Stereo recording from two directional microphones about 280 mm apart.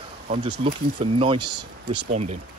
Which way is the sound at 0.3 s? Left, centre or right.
Right.